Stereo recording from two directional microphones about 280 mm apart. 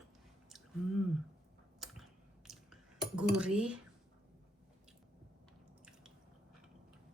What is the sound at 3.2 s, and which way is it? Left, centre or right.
Speech, centre.